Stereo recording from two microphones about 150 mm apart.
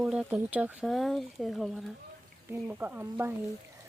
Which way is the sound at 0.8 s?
Centre (ahead or behind).